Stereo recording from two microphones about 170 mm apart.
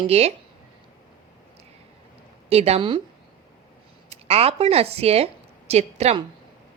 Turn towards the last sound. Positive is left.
turn(degrees=-40)  # may be behind; listen again after turning